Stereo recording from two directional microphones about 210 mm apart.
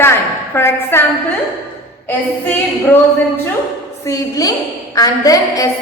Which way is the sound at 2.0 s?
10° left (ahead or behind).